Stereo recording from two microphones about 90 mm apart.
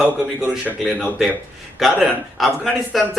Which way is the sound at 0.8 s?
5° right (ahead or behind).